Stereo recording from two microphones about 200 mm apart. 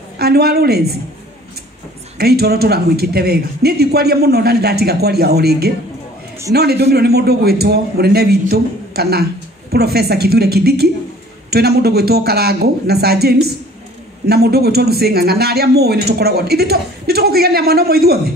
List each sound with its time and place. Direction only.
0.2 s a man's voice: 50° right (ahead or behind)
2.1 s a man's voice: 50° right (ahead or behind)